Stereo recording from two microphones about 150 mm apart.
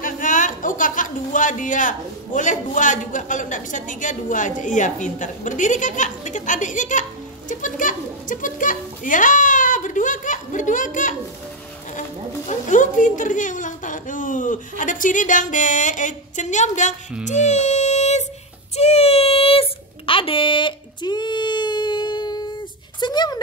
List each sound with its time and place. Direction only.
0.0 s speech: 60° left (ahead or behind)
12.4 s a woman's voice: 60° left (ahead or behind)
18.8 s a sound: 45° left (ahead or behind); by 23.4 s 30° left (ahead or behind)